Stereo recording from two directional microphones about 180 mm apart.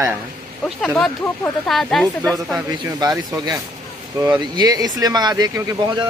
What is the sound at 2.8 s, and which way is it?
Speech, 20° right (ahead or behind).